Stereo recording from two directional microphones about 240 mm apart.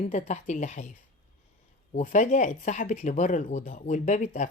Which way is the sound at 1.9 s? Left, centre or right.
Left.